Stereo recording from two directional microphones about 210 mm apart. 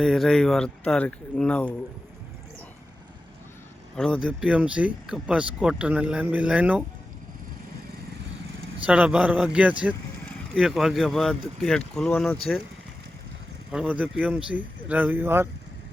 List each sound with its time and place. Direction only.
0.0 s speech: centre (ahead or behind)
3.9 s speech: 5° left (ahead or behind)
8.9 s speech: 5° right (ahead or behind)
13.7 s speech: 5° right (ahead or behind)